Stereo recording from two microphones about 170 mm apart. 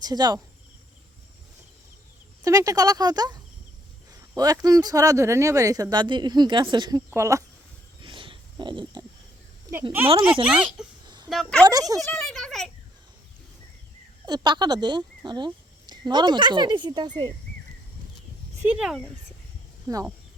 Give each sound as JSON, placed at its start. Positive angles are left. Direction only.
{"t": 0.0, "sound": "speech", "side_deg": -25}
{"t": 2.4, "sound": "speech", "side_deg": -20}
{"t": 7.1, "sound": "speech", "side_deg": -15}
{"t": 8.0, "sound": "a sound", "side_deg": -30}
{"t": 10.1, "sound": "speech", "side_deg": -30}
{"t": 10.4, "sound": "speech", "side_deg": -5}
{"t": 11.0, "sound": "a sound", "side_deg": -25}
{"t": 11.3, "sound": "speech", "side_deg": 0}
{"t": 11.6, "sound": "speech", "side_deg": -20}
{"t": 11.9, "sound": "speech", "side_deg": 0}
{"t": 14.3, "sound": "speech", "side_deg": -25}
{"t": 18.6, "sound": "speech", "side_deg": -5}
{"t": 19.9, "sound": "speech", "side_deg": -20}